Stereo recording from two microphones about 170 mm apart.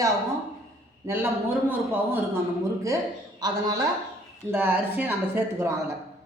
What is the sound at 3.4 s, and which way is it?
Speech, 20° right (ahead or behind).